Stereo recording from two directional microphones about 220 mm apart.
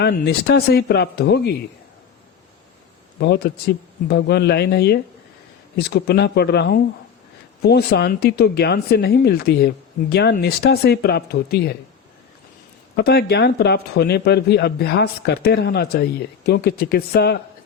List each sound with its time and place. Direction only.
0.0 s speech: 45° left (ahead or behind)
3.2 s speech: 50° left (ahead or behind)
13.0 s speech: 45° left (ahead or behind)